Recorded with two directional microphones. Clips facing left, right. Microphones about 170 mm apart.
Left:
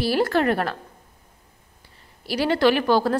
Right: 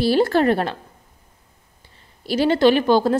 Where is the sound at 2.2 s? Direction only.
25° right (ahead or behind).